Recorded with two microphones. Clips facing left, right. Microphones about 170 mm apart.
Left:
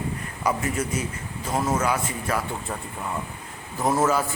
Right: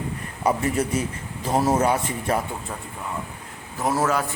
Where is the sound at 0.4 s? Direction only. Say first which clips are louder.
Right 3 dB; 30° right (ahead or behind).